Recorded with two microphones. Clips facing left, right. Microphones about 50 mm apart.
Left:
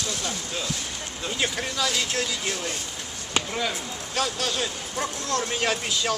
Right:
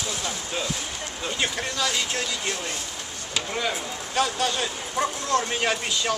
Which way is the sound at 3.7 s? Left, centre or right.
Centre.